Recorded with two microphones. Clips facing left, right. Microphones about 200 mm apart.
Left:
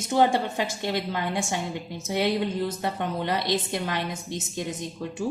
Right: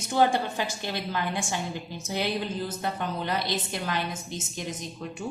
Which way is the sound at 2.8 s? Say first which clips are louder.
Left 2 dB; 25° left (ahead or behind).